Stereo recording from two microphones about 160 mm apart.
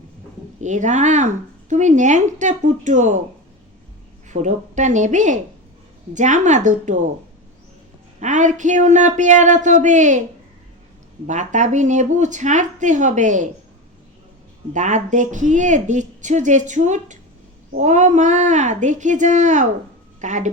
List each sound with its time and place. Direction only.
0.6 s a woman's voice: 50° right (ahead or behind)
4.3 s a woman's voice: 50° right (ahead or behind)
8.2 s a woman's voice: 50° right (ahead or behind)
11.3 s a woman's voice: 50° right (ahead or behind)
14.7 s a woman's voice: 50° right (ahead or behind)